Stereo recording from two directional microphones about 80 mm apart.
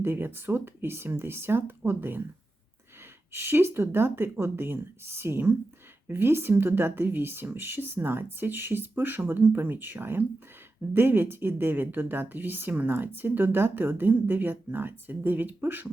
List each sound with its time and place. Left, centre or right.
0.0 s speech: right
3.3 s speech: right